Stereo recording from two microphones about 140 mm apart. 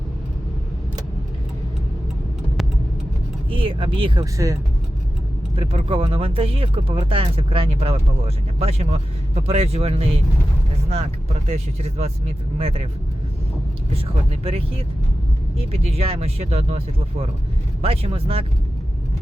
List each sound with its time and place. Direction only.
3.6 s speech: 40° right (ahead or behind)
5.5 s speech: 45° right (ahead or behind)
11.4 s speech: 45° right (ahead or behind)
14.4 s speech: 45° right (ahead or behind)